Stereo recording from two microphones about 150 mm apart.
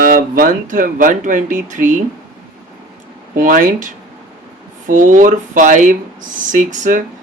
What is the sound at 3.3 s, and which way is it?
Speech, 65° right (ahead or behind).